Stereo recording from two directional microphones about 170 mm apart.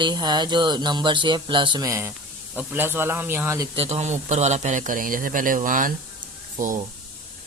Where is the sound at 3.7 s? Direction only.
35° right (ahead or behind).